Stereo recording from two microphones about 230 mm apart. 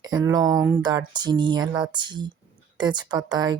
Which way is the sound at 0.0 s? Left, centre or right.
Centre.